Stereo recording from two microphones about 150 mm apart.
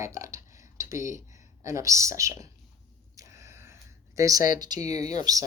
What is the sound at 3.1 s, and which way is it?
Gasp, 20° right (ahead or behind).